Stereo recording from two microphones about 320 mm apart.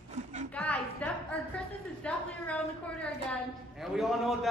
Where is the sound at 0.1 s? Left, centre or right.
Right.